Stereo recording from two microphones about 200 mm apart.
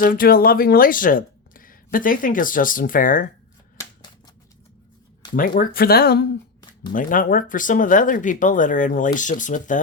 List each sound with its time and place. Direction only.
0.0 s speech: 45° left (ahead or behind)
5.4 s speech: 45° left (ahead or behind)